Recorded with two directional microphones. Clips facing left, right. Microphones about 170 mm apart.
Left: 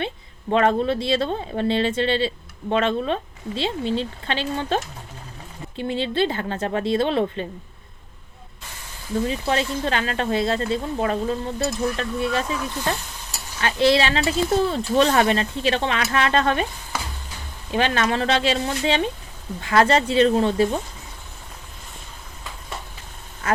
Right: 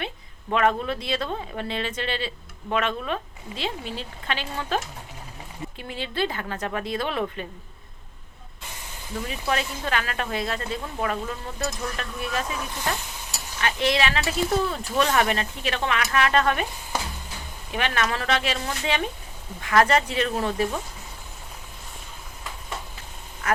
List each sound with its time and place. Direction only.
0.5 s speech: 30° left (ahead or behind)
9.2 s speech: 30° left (ahead or behind)
13.6 s speech: 30° left (ahead or behind)
17.7 s speech: 30° left (ahead or behind)